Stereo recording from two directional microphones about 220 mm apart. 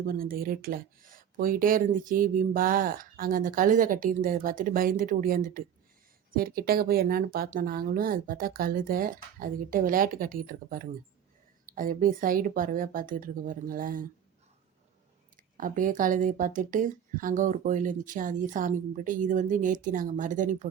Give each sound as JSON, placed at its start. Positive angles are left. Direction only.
{"t": 0.1, "sound": "speech", "side_deg": -40}
{"t": 15.5, "sound": "speech", "side_deg": -35}